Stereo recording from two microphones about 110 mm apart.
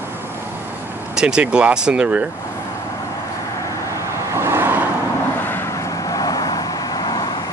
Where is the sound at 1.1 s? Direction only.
10° right (ahead or behind).